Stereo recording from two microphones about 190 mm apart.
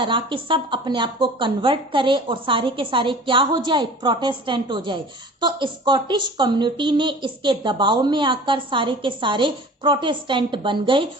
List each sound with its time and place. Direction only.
0.0 s speech: 25° right (ahead or behind)